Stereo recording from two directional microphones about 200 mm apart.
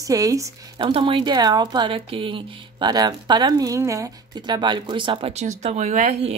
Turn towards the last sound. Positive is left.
turn(degrees=-40)  # may be behind; listen again after turning